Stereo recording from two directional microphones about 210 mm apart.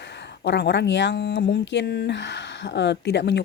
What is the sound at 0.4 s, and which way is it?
Speech, 55° left (ahead or behind).